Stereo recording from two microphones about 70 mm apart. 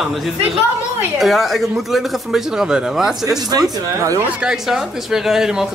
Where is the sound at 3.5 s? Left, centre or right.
Right.